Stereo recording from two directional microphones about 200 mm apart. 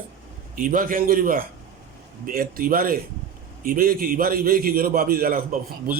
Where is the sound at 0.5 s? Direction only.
45° right (ahead or behind).